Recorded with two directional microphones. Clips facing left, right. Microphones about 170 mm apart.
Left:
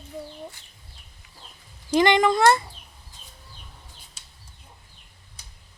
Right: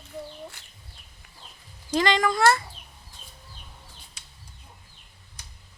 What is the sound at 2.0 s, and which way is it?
Speech, 20° left (ahead or behind).